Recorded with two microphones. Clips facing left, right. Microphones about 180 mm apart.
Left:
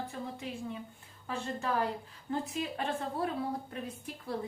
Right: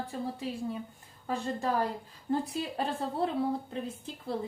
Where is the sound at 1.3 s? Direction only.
35° right (ahead or behind).